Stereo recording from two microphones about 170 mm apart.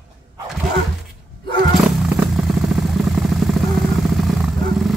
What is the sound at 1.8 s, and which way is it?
Vehicle, 5° right (ahead or behind).